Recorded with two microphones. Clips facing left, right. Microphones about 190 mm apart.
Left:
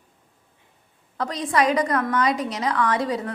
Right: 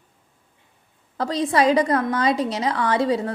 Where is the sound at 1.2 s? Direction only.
30° right (ahead or behind).